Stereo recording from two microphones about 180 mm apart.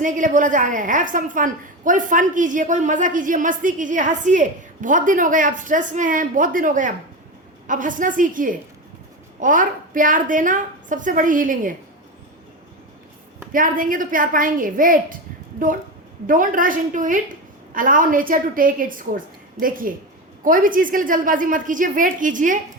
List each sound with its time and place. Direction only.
0.0 s a woman's voice: 45° right (ahead or behind)
13.5 s a woman's voice: 50° right (ahead or behind)